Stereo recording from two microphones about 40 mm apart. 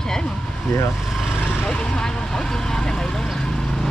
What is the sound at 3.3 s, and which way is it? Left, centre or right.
Vehicle, centre.